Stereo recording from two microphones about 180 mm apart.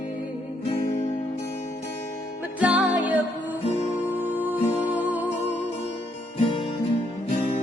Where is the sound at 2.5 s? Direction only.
10° right (ahead or behind).